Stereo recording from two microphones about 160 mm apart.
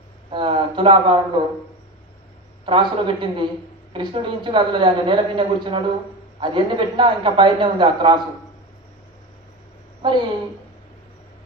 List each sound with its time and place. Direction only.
0.3 s a woman's voice: 30° right (ahead or behind)
2.6 s a man's voice: 30° right (ahead or behind)
10.0 s a man's voice: 30° right (ahead or behind)